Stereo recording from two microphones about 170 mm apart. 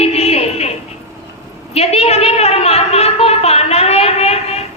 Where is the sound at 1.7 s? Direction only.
35° left (ahead or behind).